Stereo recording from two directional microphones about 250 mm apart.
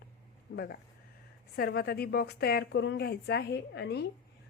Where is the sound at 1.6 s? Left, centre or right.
Left.